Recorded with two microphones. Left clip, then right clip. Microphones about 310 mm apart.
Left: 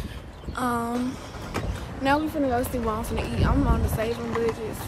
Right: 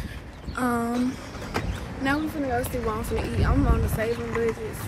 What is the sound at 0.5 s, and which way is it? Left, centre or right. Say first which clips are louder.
Speech: even; centre.